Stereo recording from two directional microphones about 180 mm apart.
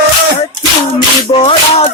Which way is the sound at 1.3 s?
30° left (ahead or behind).